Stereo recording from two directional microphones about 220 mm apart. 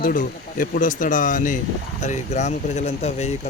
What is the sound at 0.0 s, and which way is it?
Speech, 40° left (ahead or behind).